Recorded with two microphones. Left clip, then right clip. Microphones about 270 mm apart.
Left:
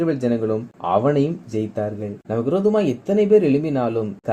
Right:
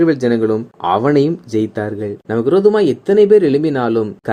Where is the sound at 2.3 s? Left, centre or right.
Right.